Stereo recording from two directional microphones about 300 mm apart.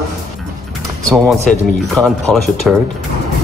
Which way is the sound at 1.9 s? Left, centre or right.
Centre.